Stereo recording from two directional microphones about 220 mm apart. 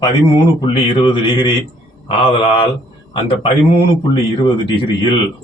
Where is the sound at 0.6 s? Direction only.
20° left (ahead or behind).